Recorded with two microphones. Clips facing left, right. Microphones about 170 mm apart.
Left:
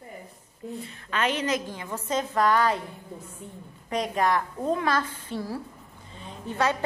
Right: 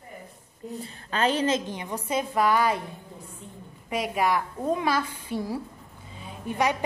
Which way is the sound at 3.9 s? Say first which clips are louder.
Even; 5° right (ahead or behind).